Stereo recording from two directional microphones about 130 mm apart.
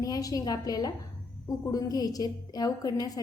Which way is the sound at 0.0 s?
25° left (ahead or behind).